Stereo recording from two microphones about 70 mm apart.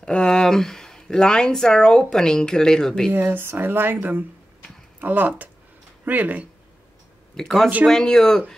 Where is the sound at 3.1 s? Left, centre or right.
Right.